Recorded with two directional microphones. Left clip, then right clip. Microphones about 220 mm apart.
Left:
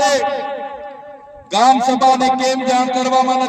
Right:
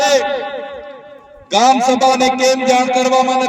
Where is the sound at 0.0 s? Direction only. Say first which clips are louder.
Right 2 dB; 50° right (ahead or behind).